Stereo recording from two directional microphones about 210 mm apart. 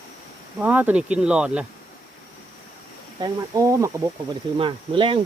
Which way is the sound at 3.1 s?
15° right (ahead or behind).